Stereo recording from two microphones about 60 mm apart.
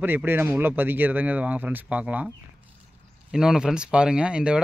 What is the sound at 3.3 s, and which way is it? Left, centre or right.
Speech, centre.